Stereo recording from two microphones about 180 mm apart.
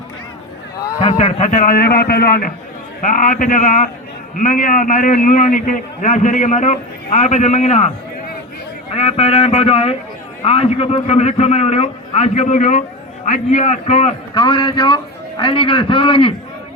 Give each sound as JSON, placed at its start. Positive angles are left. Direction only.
{"t": 0.8, "sound": "a sound", "side_deg": 20}
{"t": 1.1, "sound": "a man's voice", "side_deg": 40}
{"t": 14.3, "sound": "a man's voice", "side_deg": 25}